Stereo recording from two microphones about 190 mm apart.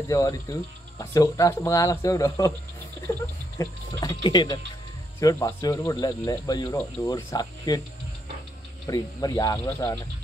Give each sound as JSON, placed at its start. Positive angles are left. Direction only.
{"t": 0.1, "sound": "speech", "side_deg": 15}
{"t": 3.5, "sound": "speech", "side_deg": 20}
{"t": 8.8, "sound": "speech", "side_deg": 20}